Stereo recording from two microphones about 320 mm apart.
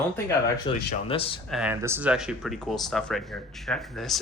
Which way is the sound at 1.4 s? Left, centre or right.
Centre.